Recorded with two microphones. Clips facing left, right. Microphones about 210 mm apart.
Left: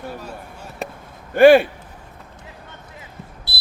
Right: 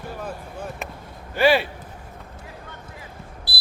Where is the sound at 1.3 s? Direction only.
50° left (ahead or behind).